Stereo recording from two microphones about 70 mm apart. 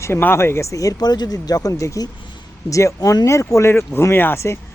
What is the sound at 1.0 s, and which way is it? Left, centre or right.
Speech, left.